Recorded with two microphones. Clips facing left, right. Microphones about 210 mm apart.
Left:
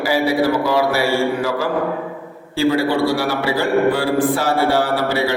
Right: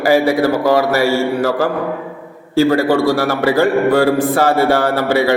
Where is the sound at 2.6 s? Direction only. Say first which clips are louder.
Right 4 dB; 45° right (ahead or behind).